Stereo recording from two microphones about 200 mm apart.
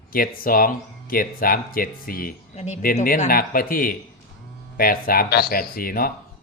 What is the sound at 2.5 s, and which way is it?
A man's voice, 35° left (ahead or behind).